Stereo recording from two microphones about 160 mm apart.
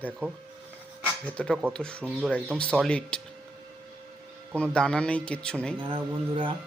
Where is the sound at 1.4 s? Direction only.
5° left (ahead or behind).